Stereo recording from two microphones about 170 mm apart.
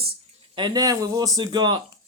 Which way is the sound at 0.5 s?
25° right (ahead or behind).